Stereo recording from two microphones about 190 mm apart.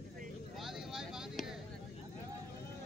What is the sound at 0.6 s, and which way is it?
Vehicle, centre (ahead or behind).